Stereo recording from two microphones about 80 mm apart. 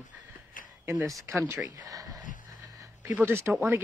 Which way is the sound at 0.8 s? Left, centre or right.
Right.